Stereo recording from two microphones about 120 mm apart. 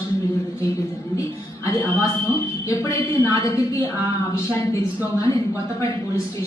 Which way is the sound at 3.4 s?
30° left (ahead or behind).